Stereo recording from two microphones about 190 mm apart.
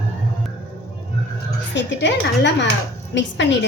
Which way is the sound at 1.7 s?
70° left (ahead or behind).